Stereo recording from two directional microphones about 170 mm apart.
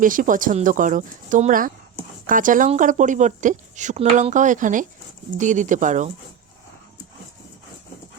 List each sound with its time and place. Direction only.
0.0 s speech: 50° right (ahead or behind)